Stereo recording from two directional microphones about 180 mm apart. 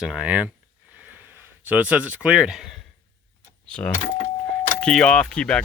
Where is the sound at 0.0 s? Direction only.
5° right (ahead or behind).